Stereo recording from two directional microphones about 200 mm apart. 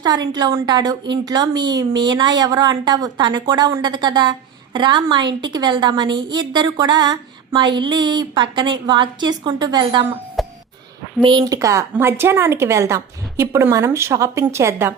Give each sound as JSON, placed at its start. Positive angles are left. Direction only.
{"t": 0.0, "sound": "a woman's voice", "side_deg": -20}
{"t": 10.4, "sound": "a sound", "side_deg": 0}
{"t": 11.2, "sound": "a woman's voice", "side_deg": -25}